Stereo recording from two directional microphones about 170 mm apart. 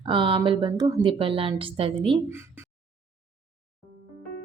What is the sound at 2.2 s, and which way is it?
Speech, 15° right (ahead or behind).